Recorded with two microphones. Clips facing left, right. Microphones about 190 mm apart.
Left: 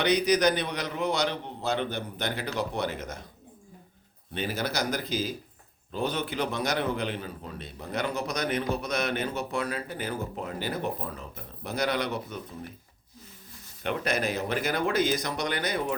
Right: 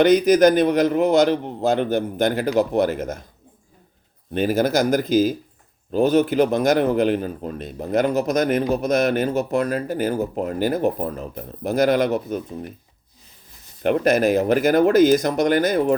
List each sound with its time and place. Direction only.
0.3 s a man's voice: 50° right (ahead or behind)
4.4 s a man's voice: 50° right (ahead or behind)
13.8 s a man's voice: 45° right (ahead or behind)